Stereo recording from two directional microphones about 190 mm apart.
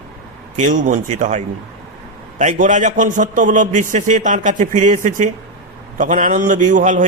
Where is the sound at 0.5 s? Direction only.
40° right (ahead or behind).